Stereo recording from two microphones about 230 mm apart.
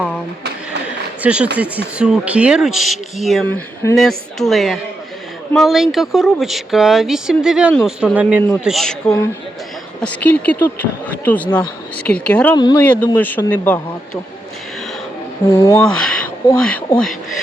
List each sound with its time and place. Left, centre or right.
1.2 s speech: centre
12.5 s speech: centre
12.8 s speech: centre
15.4 s speech: centre